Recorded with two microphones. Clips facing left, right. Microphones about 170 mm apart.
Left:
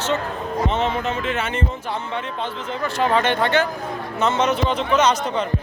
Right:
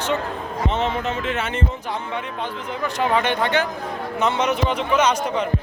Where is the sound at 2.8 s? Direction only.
15° right (ahead or behind).